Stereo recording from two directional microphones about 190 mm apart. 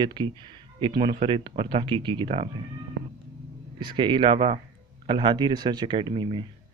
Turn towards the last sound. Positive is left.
turn(degrees=-25)  # may be behind; listen again after turning